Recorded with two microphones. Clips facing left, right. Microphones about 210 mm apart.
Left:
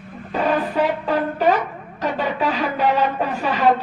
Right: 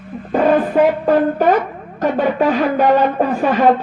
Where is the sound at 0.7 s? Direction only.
50° right (ahead or behind).